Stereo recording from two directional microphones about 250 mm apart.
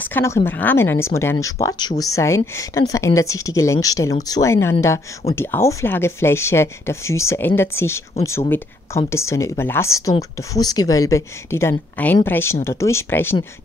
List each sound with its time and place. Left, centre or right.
0.0 s speech: centre